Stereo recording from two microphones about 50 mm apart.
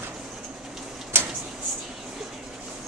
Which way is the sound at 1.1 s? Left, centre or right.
Right.